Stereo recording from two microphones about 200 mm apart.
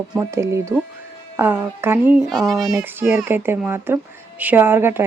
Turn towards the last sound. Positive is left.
turn(degrees=-10)  # may be behind; listen again after turning